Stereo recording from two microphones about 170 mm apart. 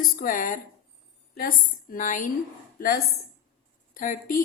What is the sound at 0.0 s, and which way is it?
A woman's voice, 50° left (ahead or behind).